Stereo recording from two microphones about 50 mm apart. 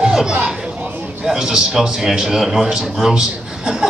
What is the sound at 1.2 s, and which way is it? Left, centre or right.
A man's voice, centre.